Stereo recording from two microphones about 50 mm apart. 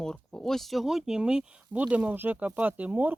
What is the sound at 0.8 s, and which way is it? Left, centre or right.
Speech, centre.